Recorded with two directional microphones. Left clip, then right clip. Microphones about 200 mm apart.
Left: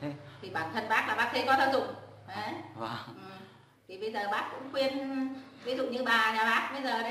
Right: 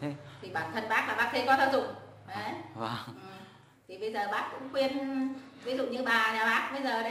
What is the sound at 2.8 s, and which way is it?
Speech, 55° right (ahead or behind).